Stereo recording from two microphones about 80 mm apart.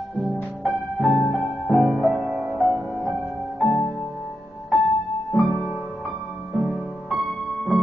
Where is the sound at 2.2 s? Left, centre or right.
Centre.